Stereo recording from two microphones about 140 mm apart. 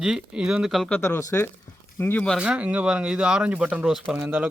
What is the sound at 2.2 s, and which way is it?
Speech, 5° right (ahead or behind).